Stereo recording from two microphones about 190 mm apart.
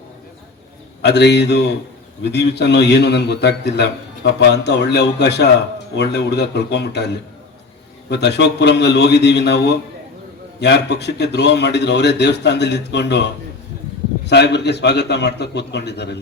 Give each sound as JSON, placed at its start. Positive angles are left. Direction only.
{"t": 1.0, "sound": "a man's voice", "side_deg": 65}
{"t": 14.3, "sound": "a man's voice", "side_deg": 65}